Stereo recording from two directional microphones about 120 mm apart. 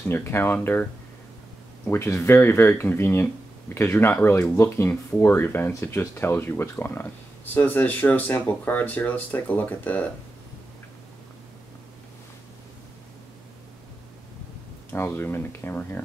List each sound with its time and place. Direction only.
0.0 s speech: 20° left (ahead or behind)
1.9 s speech: 25° left (ahead or behind)
14.9 s speech: 20° left (ahead or behind)